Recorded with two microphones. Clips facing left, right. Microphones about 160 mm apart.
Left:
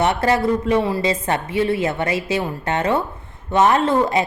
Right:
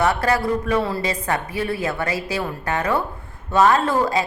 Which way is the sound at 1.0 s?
25° left (ahead or behind).